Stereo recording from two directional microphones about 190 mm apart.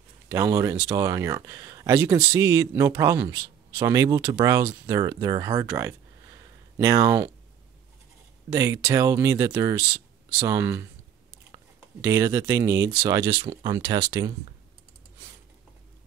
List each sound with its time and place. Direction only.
0.3 s speech: 15° right (ahead or behind)
8.5 s speech: 15° right (ahead or behind)